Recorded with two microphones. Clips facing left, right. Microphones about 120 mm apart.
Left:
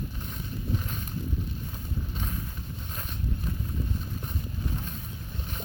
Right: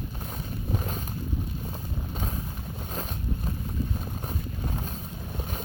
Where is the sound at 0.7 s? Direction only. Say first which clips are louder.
Right 2 dB; 40° right (ahead or behind).